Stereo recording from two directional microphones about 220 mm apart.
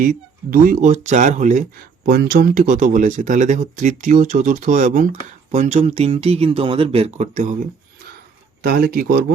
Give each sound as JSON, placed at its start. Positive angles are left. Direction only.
{"t": 0.0, "sound": "speech", "side_deg": -40}
{"t": 8.6, "sound": "speech", "side_deg": -40}